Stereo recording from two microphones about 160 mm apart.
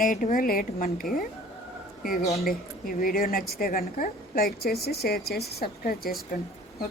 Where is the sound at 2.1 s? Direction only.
40° left (ahead or behind).